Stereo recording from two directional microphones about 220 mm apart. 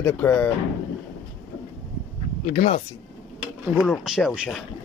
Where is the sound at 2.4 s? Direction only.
35° left (ahead or behind).